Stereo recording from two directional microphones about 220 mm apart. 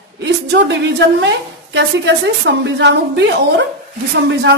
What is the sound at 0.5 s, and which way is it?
A woman's voice, 50° right (ahead or behind).